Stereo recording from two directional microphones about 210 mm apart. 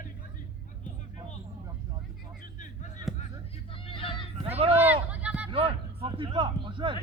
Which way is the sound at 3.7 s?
25° left (ahead or behind).